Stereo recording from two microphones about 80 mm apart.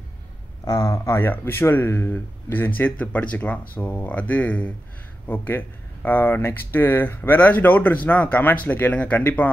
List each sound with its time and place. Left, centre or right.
0.7 s speech: left
1.1 s speech: left